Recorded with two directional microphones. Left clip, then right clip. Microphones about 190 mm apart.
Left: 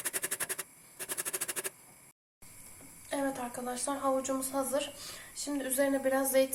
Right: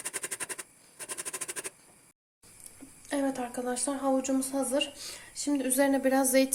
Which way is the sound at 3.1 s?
45° right (ahead or behind).